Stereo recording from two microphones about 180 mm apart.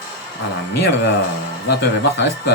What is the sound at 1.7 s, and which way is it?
Speech, 65° left (ahead or behind).